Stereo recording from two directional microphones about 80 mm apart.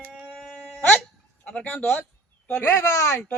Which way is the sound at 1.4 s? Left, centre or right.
Centre.